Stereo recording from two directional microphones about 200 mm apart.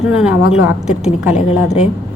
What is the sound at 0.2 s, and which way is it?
A woman's voice, 5° right (ahead or behind).